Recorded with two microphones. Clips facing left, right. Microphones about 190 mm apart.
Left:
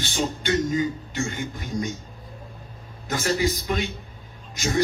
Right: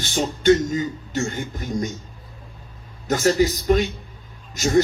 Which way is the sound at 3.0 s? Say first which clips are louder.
Right 6 dB; 40° right (ahead or behind).